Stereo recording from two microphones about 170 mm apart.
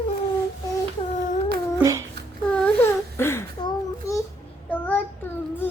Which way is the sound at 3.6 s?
25° left (ahead or behind).